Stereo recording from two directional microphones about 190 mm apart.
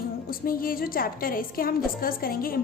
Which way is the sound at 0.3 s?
50° left (ahead or behind).